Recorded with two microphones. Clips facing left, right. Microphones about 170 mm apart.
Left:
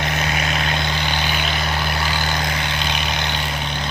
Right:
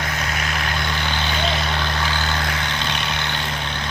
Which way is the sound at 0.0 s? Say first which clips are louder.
Left 3 dB; 20° left (ahead or behind).